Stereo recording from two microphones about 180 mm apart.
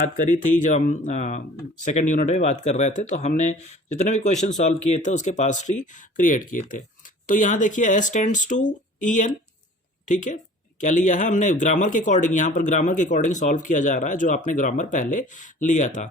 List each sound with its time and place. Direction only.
0.2 s speech: 45° left (ahead or behind)